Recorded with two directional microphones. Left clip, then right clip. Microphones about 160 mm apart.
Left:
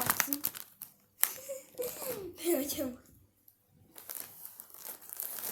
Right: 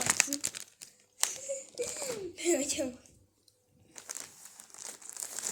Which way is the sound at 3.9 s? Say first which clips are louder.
Right 5 dB; 45° right (ahead or behind).